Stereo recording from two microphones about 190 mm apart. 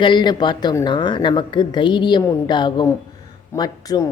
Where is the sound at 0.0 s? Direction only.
25° left (ahead or behind).